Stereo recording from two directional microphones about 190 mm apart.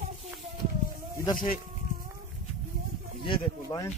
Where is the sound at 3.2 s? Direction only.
25° left (ahead or behind).